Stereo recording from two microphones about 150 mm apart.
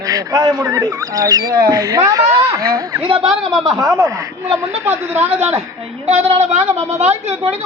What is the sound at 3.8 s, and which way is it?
A woman's voice, 20° right (ahead or behind).